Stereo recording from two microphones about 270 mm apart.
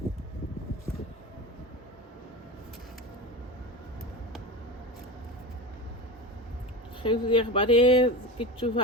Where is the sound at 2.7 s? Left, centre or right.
Centre.